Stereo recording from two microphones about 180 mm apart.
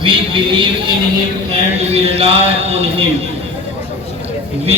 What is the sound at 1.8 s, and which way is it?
A man's voice, 35° right (ahead or behind).